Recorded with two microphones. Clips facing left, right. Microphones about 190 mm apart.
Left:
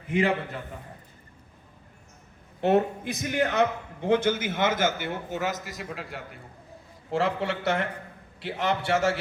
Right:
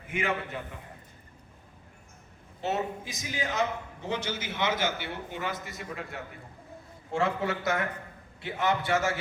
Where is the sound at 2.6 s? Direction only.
60° left (ahead or behind).